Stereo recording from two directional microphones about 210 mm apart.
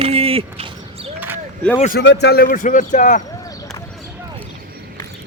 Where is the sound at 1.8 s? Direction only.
40° left (ahead or behind).